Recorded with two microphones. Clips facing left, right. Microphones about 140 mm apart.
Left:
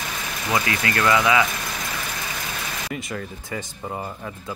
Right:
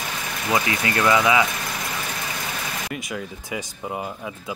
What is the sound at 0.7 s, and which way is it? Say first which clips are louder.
Speech: even; 20° right (ahead or behind).